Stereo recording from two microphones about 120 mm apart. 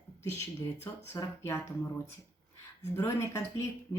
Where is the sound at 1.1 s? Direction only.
20° left (ahead or behind).